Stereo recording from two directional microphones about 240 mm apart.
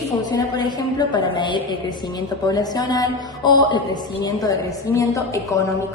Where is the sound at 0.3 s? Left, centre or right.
Centre.